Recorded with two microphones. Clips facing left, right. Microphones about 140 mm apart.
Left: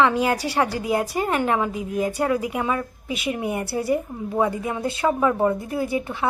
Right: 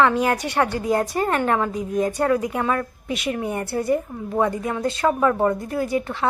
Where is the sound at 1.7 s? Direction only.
30° right (ahead or behind).